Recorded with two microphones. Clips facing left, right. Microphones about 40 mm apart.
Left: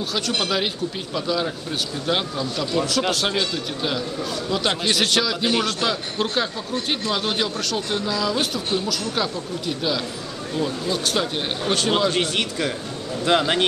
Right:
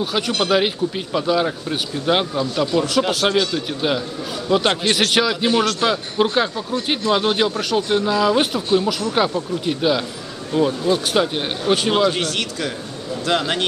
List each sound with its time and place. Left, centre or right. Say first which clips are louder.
0.4 s speech: right 8 dB; centre
12.2 s speech: even; centre